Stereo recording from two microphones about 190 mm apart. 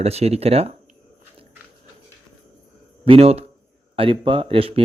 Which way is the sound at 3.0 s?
30° right (ahead or behind).